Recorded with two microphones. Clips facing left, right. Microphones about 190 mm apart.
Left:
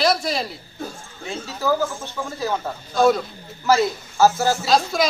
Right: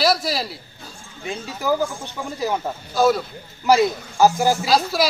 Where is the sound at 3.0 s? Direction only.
Centre (ahead or behind).